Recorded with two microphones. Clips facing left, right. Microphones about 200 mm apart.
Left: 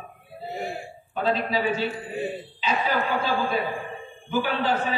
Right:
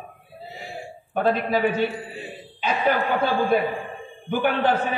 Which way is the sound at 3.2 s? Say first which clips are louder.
Right 5 dB; 55° right (ahead or behind).